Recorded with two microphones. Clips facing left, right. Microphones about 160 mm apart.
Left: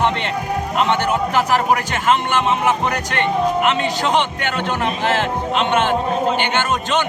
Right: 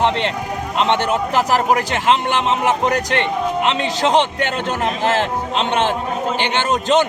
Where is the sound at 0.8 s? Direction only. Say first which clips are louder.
Right 1 dB; 30° right (ahead or behind).